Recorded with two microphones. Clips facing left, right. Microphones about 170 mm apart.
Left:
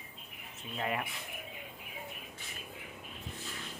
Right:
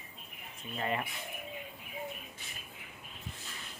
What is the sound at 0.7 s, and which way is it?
Speech, 5° left (ahead or behind).